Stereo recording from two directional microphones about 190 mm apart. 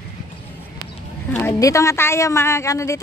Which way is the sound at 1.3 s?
15° left (ahead or behind).